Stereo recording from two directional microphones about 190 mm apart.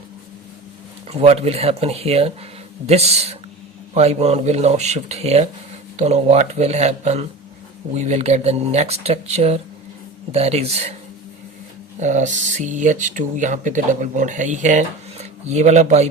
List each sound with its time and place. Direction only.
1.1 s speech: 35° right (ahead or behind)
11.9 s speech: 40° right (ahead or behind)